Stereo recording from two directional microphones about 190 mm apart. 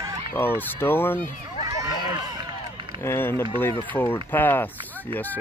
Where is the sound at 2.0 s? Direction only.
25° right (ahead or behind).